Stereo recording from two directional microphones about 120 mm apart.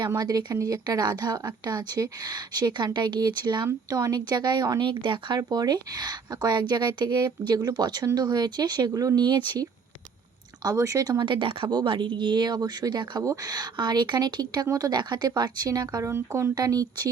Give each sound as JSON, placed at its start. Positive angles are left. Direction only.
{"t": 0.2, "sound": "a woman's voice", "side_deg": -35}
{"t": 5.4, "sound": "a woman's voice", "side_deg": -35}